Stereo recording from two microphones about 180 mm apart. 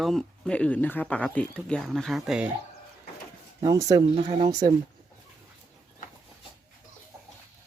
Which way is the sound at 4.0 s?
35° right (ahead or behind).